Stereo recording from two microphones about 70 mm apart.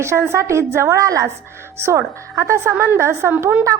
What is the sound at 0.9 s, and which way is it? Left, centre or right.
Speech, right.